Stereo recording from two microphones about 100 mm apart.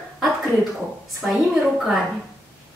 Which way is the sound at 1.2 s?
5° right (ahead or behind).